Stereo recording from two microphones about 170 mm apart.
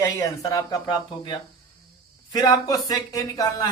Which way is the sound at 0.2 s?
20° left (ahead or behind).